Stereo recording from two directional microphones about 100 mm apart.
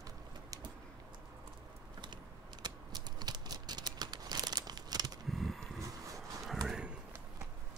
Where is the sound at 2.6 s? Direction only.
45° right (ahead or behind).